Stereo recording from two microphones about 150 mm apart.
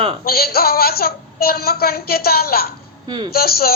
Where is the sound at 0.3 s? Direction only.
90° left.